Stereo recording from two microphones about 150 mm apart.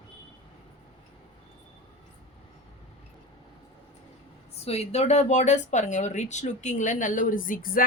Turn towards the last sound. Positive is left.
turn(degrees=70)  # may be behind; listen again after turning